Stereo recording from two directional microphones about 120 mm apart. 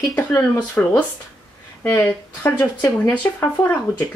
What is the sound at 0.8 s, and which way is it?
Speech, 15° left (ahead or behind).